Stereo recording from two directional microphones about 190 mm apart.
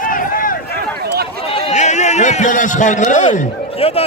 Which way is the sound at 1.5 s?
30° left (ahead or behind).